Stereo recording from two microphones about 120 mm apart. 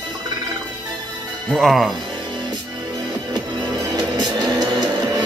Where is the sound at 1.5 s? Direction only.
Centre (ahead or behind).